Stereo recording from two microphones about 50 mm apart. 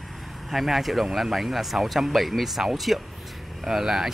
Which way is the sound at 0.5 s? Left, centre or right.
Centre.